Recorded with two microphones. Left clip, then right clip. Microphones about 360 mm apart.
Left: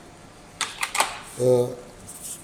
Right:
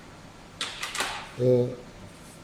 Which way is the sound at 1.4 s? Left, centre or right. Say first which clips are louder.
Left 3 dB; left.